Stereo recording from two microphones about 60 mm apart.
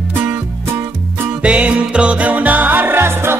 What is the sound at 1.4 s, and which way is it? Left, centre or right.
Music, right.